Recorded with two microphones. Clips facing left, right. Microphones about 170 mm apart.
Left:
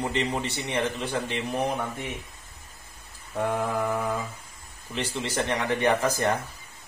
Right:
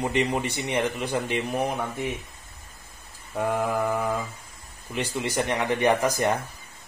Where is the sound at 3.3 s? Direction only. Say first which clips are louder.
Right 1 dB; 10° right (ahead or behind).